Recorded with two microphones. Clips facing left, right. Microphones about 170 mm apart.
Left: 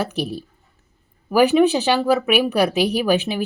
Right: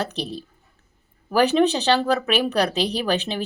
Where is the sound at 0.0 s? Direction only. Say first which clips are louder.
Left 4 dB; 10° left (ahead or behind).